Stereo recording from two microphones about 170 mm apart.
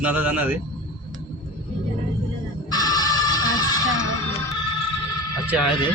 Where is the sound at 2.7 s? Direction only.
25° left (ahead or behind).